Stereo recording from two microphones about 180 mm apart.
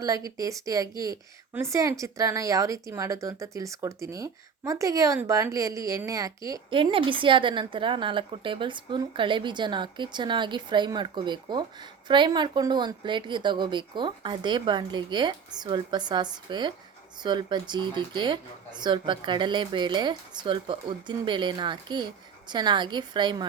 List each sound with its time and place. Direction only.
0.0 s a woman's voice: 20° right (ahead or behind)